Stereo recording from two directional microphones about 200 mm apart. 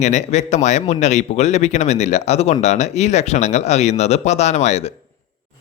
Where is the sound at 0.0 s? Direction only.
35° left (ahead or behind).